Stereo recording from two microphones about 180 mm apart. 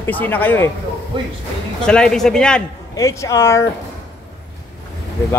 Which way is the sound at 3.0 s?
20° left (ahead or behind).